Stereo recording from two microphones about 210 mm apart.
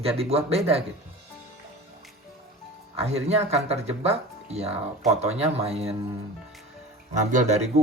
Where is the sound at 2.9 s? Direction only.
30° right (ahead or behind).